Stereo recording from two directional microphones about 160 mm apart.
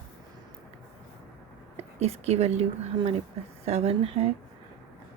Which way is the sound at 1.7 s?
40° right (ahead or behind).